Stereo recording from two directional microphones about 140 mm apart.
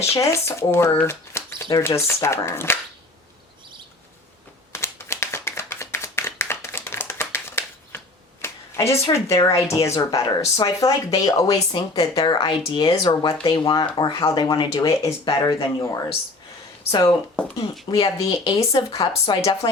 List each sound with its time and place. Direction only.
0.0 s speech: 20° left (ahead or behind)
4.7 s clapping: 20° left (ahead or behind)
9.3 s speech: 20° left (ahead or behind)
15.2 s speech: 35° left (ahead or behind)
17.4 s speech: 5° left (ahead or behind)
17.8 s speech: 30° left (ahead or behind)